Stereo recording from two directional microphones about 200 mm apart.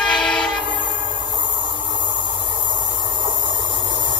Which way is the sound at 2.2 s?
25° right (ahead or behind).